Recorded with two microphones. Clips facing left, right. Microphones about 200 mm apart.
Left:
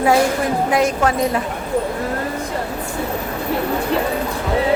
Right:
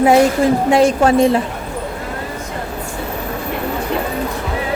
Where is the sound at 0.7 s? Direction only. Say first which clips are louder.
Right 5 dB; 30° right (ahead or behind).